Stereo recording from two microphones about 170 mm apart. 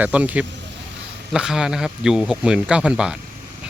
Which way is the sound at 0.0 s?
10° right (ahead or behind).